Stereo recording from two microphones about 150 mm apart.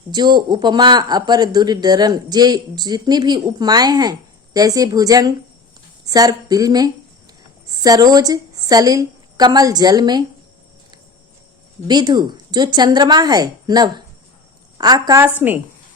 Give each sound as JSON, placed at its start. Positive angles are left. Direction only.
{"t": 0.1, "sound": "a woman's voice", "side_deg": -30}
{"t": 11.9, "sound": "speech", "side_deg": -30}
{"t": 15.4, "sound": "a woman's voice", "side_deg": -10}